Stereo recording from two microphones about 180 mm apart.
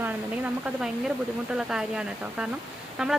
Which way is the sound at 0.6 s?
5° right (ahead or behind).